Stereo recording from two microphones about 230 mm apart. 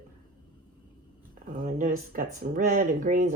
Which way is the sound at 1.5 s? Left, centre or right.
Right.